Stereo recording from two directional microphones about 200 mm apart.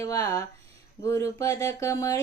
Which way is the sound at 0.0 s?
15° left (ahead or behind).